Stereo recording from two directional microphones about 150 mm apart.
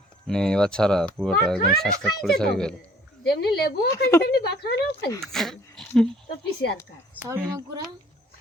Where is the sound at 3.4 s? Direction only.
90° left.